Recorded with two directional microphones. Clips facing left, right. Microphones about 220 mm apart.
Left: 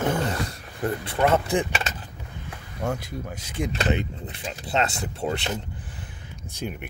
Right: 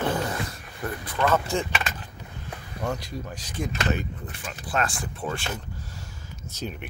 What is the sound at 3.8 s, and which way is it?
Speech, 20° left (ahead or behind).